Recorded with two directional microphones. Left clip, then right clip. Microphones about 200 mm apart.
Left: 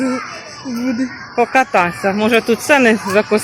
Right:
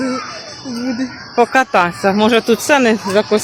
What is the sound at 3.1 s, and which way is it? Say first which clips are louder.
Speech: even; 5° left (ahead or behind).